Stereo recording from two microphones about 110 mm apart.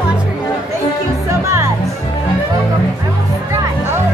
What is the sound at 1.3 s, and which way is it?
Music, 25° right (ahead or behind).